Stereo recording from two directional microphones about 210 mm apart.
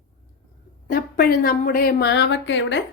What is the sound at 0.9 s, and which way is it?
A woman's voice, 45° left (ahead or behind).